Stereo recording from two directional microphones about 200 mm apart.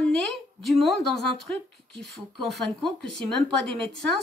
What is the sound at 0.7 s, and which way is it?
Speech, centre (ahead or behind).